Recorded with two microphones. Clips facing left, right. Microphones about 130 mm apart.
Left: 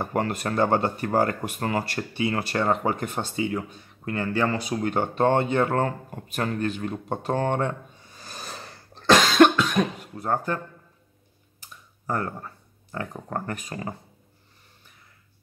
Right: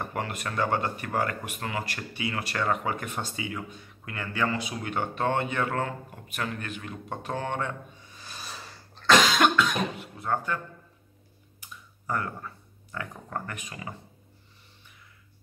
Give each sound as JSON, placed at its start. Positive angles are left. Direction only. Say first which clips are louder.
{"t": 0.0, "sound": "speech", "louder": "left 6 dB", "side_deg": 40}
{"t": 8.2, "sound": "a sound", "louder": "left 4 dB", "side_deg": 45}
{"t": 9.6, "sound": "speech", "louder": "left 3 dB", "side_deg": 40}
{"t": 11.6, "sound": "speech", "louder": "left 3 dB", "side_deg": 35}